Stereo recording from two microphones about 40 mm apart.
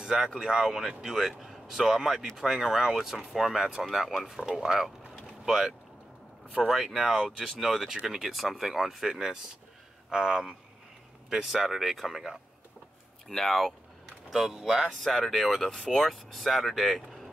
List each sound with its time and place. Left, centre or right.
0.0 s speech: centre
4.5 s boat: centre
6.7 s speech: centre
11.6 s speech: centre
13.3 s speech: centre
14.9 s speech: centre